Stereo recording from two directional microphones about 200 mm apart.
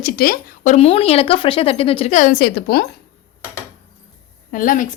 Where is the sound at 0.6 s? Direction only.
35° left (ahead or behind); by 2.8 s 55° left (ahead or behind).